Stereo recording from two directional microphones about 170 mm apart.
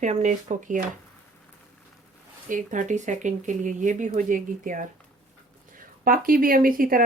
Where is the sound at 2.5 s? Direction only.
50° right (ahead or behind).